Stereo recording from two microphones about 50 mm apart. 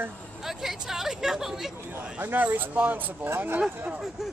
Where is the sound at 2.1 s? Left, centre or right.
Right.